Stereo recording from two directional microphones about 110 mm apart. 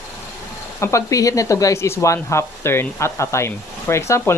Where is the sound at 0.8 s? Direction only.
25° left (ahead or behind).